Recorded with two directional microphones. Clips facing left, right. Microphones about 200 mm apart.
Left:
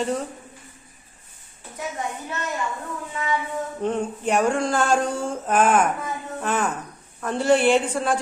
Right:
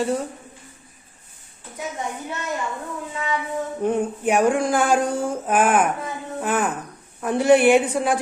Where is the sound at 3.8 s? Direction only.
10° right (ahead or behind).